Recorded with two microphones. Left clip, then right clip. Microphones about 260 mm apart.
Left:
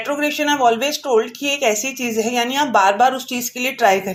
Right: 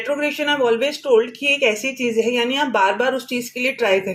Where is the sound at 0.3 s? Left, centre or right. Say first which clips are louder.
Left 3 dB; left.